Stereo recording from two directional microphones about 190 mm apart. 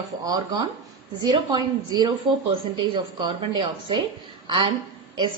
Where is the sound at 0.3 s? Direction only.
20° right (ahead or behind).